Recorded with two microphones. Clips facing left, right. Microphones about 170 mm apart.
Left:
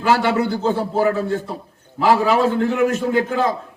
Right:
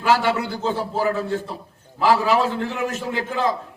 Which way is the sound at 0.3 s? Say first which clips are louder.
Left 4 dB; 45° left (ahead or behind).